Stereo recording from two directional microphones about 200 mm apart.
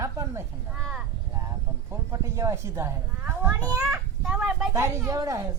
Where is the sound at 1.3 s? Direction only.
15° right (ahead or behind).